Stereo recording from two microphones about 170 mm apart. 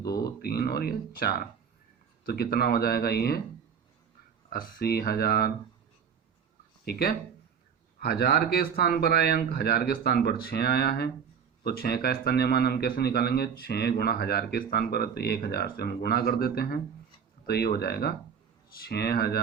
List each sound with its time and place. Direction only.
0.4 s speech: 65° left (ahead or behind)
4.4 s speech: 65° left (ahead or behind)
7.9 s a man's voice: 65° left (ahead or behind)